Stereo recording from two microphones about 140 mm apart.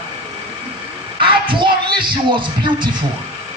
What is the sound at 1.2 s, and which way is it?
Speech, 35° right (ahead or behind).